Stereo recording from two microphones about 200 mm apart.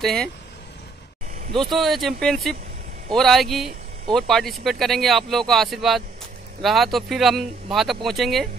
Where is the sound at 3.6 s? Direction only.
35° right (ahead or behind).